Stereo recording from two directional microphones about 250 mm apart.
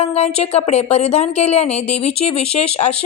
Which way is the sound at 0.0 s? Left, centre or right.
Left.